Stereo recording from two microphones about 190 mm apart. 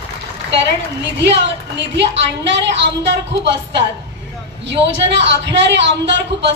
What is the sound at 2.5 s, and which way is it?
Speech, 70° right (ahead or behind).